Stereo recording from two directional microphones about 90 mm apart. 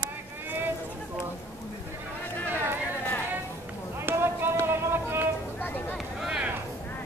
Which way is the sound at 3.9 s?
25° right (ahead or behind).